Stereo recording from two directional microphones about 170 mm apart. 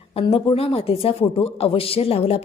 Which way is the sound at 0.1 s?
35° left (ahead or behind).